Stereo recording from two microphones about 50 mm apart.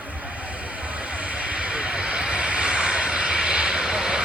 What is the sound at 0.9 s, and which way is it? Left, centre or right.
Vehicle, right.